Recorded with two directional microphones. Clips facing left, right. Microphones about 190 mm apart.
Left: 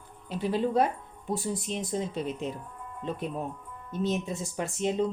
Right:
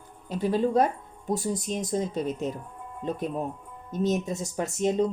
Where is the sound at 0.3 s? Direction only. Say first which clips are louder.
Right 3 dB; 45° right (ahead or behind).